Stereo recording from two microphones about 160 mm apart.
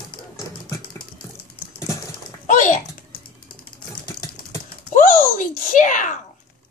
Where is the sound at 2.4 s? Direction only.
55° left (ahead or behind).